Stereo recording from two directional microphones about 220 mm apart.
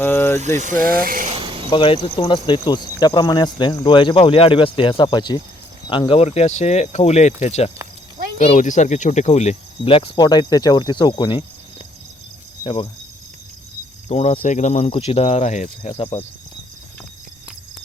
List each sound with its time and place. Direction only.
0.0 s vehicle: 10° left (ahead or behind)
0.5 s speech: 35° right (ahead or behind)
1.3 s a sound: 25° right (ahead or behind)
1.7 s speech: 20° left (ahead or behind)
12.6 s speech: 25° left (ahead or behind)
14.1 s speech: 30° left (ahead or behind)